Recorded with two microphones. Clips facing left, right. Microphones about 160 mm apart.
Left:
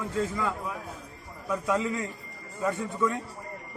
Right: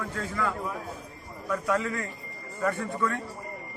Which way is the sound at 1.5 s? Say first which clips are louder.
Even; 20° left (ahead or behind).